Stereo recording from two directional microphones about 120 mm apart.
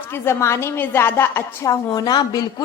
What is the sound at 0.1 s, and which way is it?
A woman's voice, 20° left (ahead or behind).